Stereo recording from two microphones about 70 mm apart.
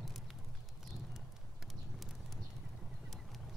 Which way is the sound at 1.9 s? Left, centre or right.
Centre.